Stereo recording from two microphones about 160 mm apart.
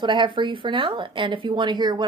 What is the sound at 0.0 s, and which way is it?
Speech, 30° right (ahead or behind).